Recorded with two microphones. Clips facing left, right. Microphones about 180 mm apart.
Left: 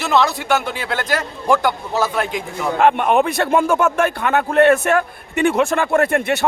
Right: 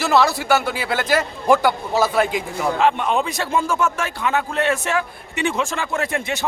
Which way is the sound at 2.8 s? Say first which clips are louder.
Left 6 dB; 55° left (ahead or behind).